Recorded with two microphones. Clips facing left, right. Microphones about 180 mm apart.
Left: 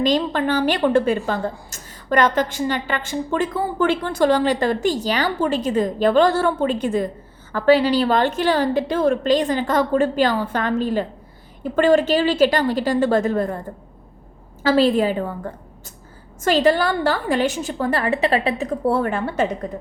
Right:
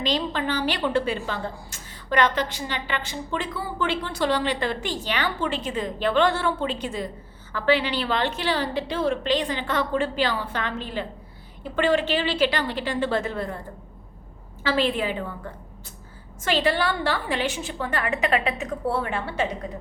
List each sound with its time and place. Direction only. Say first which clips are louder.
0.0 s a woman's voice: left 7 dB; 45° left (ahead or behind)
14.6 s a woman's voice: left 7 dB; 40° left (ahead or behind)
16.4 s a woman's voice: left 6 dB; 40° left (ahead or behind)